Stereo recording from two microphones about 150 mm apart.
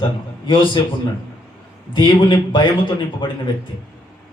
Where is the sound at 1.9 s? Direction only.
30° left (ahead or behind).